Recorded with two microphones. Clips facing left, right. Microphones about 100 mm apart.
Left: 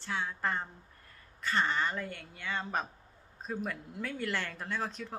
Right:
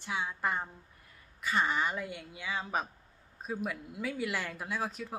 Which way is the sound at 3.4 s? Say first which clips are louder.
Right 1 dB; 5° right (ahead or behind).